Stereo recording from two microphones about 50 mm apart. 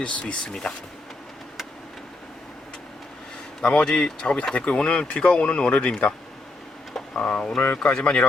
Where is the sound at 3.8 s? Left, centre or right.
Centre.